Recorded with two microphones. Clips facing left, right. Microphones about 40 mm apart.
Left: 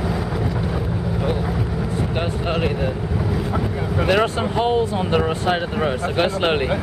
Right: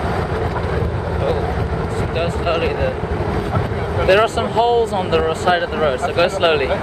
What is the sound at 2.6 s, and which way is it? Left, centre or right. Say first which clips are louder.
Speech: right 3 dB; right.